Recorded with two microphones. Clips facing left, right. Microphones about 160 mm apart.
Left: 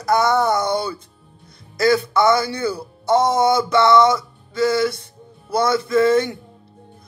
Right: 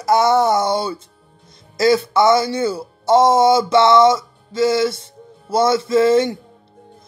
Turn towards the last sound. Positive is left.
turn(degrees=-25)  # may be behind; listen again after turning